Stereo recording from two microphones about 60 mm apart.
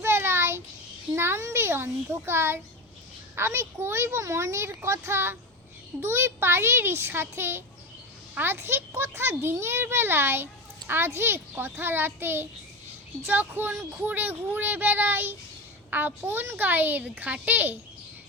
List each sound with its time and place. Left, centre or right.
0.0 s a sound: right
1.1 s child singing: right
3.3 s a child's voice: right